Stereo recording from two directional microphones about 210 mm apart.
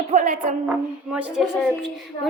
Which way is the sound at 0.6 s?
5° right (ahead or behind).